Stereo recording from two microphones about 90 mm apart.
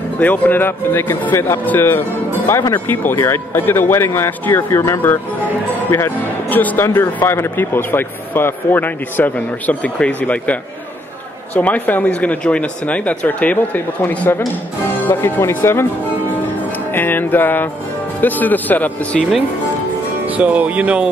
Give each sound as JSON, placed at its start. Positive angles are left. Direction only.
{"t": 0.2, "sound": "speech", "side_deg": 20}
{"t": 16.9, "sound": "speech", "side_deg": 20}
{"t": 20.3, "sound": "speech", "side_deg": -15}